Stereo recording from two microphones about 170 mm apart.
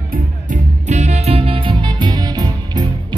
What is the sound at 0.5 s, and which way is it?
Music, 45° right (ahead or behind).